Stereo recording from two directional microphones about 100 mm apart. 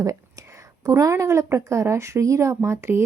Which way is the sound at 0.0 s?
35° right (ahead or behind).